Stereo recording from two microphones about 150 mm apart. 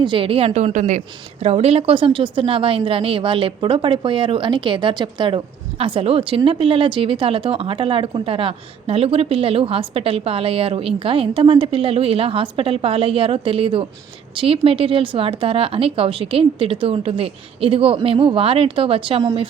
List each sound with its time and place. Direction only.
0.0 s speech: 35° right (ahead or behind)